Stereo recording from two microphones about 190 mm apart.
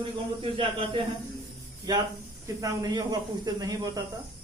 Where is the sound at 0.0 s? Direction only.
25° right (ahead or behind).